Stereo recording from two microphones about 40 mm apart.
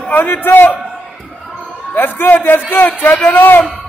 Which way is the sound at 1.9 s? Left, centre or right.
Left.